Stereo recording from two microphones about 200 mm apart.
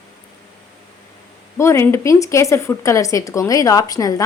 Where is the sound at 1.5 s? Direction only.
15° left (ahead or behind).